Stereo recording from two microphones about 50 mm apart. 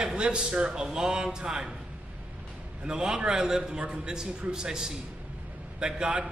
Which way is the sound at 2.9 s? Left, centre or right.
Centre.